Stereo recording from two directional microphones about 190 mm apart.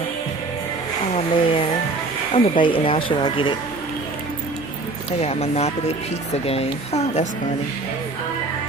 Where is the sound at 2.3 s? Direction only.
25° left (ahead or behind).